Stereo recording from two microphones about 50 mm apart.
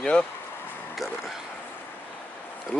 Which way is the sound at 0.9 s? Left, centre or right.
Centre.